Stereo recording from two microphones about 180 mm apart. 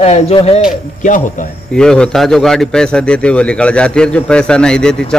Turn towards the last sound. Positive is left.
turn(degrees=5)  # may be behind; listen again after turning